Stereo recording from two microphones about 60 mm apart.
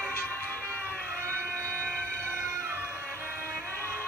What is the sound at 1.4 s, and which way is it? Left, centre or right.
Train, right.